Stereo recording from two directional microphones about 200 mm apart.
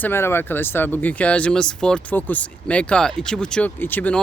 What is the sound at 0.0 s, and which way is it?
Speech, 10° left (ahead or behind).